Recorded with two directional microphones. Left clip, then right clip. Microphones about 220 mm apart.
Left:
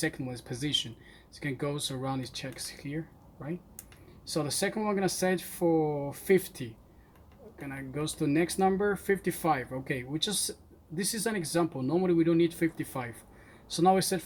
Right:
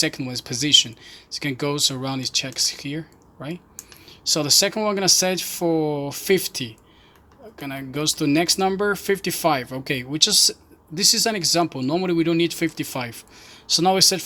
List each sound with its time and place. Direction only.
0.0 s speech: 40° right (ahead or behind)
4.2 s speech: 40° right (ahead or behind)